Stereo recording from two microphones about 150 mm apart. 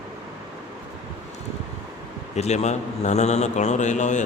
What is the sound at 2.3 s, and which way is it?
A man's voice, 45° left (ahead or behind).